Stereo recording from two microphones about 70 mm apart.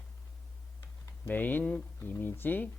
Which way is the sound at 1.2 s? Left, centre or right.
Left.